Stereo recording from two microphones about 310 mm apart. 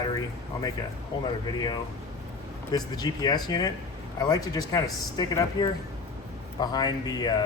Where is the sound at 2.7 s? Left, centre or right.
Centre.